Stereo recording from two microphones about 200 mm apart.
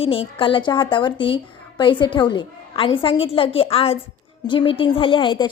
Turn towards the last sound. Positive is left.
turn(degrees=25)  # may be behind; listen again after turning